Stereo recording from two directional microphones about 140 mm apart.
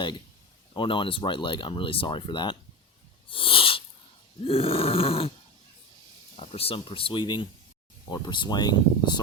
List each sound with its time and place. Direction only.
0.7 s speech: 35° left (ahead or behind)
3.2 s a sound: 40° left (ahead or behind)
4.4 s speech: 40° left (ahead or behind)
6.3 s speech: 45° left (ahead or behind)